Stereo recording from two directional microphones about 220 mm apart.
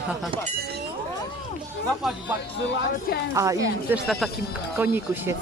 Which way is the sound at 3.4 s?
15° right (ahead or behind).